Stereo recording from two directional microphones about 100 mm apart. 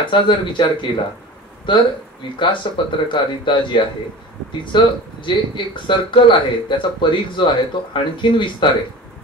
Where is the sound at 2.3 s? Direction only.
55° left (ahead or behind).